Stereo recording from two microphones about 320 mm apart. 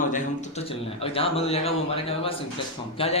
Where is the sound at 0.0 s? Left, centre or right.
Left.